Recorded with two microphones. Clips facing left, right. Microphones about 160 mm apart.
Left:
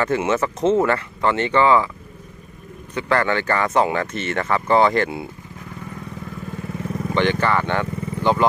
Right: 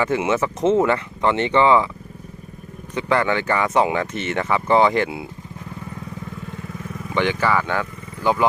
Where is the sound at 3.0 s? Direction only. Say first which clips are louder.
Even; 15° right (ahead or behind).